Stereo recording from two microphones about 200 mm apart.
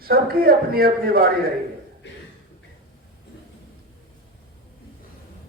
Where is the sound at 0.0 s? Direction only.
50° right (ahead or behind).